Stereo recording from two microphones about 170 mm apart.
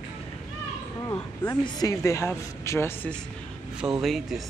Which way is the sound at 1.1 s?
15° left (ahead or behind).